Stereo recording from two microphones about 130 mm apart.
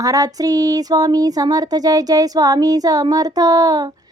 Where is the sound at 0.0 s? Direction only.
25° right (ahead or behind).